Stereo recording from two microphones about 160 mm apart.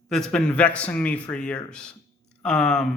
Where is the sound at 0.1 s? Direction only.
5° left (ahead or behind).